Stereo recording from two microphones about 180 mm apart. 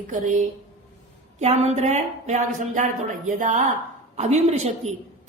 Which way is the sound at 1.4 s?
40° right (ahead or behind).